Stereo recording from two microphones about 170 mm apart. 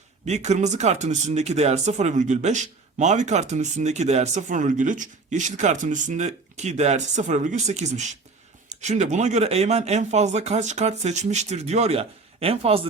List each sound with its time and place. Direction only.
0.3 s speech: 40° right (ahead or behind)